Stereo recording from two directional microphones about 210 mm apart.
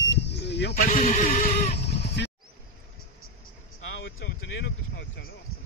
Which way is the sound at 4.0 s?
60° left (ahead or behind).